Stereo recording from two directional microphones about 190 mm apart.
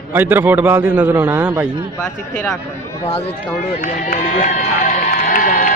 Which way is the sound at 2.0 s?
5° left (ahead or behind).